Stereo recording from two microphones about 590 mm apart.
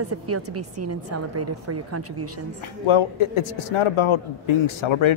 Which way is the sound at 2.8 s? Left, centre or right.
Left.